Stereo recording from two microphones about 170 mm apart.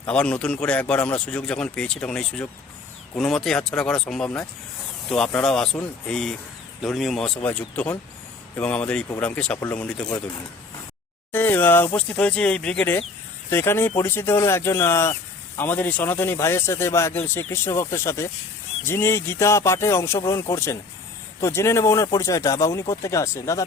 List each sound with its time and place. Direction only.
0.1 s speech: 5° left (ahead or behind)
11.3 s speech: 10° left (ahead or behind)